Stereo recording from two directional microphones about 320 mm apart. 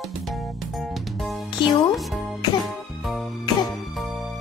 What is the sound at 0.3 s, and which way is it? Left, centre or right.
Music, centre.